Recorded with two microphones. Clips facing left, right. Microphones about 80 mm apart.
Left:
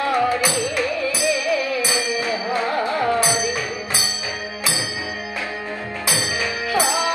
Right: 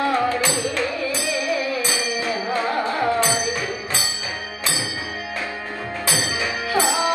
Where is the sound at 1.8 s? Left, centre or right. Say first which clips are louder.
Left 2 dB; centre.